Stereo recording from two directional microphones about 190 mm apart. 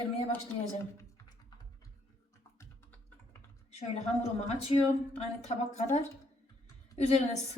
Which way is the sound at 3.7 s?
35° left (ahead or behind).